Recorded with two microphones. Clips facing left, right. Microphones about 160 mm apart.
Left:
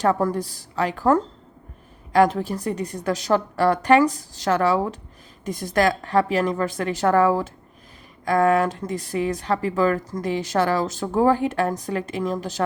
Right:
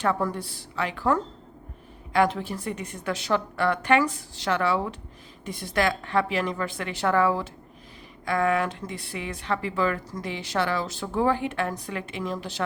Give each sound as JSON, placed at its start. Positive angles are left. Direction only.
{"t": 0.0, "sound": "speech", "side_deg": 40}